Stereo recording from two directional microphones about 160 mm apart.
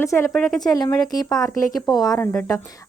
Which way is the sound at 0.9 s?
25° left (ahead or behind).